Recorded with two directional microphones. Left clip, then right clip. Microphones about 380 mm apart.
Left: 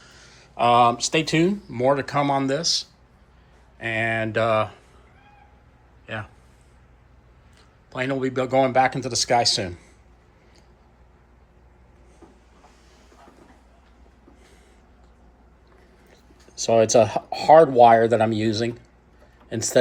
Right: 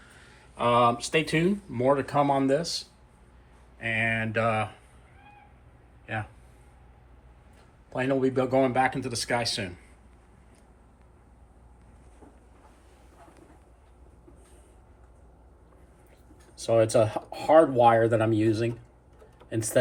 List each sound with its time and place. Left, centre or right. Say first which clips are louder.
0.0 s speech: left 4 dB; centre
3.8 s speech: left 3 dB; centre
7.9 s speech: left 1 dB; centre
16.6 s speech: left 5 dB; left